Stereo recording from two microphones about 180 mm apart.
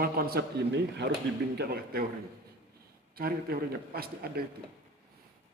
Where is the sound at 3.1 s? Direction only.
55° right (ahead or behind).